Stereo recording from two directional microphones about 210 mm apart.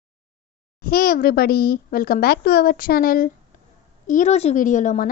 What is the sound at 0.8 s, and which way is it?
A child's voice, 45° left (ahead or behind).